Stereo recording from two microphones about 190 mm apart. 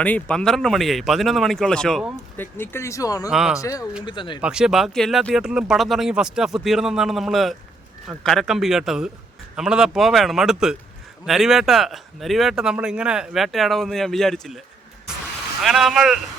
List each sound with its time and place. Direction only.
0.0 s speech: 5° left (ahead or behind)
3.3 s speech: centre (ahead or behind)
3.6 s speech: 15° left (ahead or behind)
4.4 s speech: 5° right (ahead or behind)
15.6 s speech: centre (ahead or behind)